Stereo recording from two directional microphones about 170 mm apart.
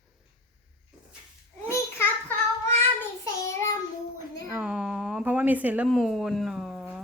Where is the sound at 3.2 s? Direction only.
20° left (ahead or behind).